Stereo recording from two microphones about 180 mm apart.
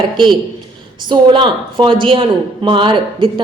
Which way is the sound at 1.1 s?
25° right (ahead or behind).